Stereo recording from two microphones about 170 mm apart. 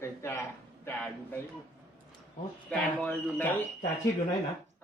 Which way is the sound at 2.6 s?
5° left (ahead or behind).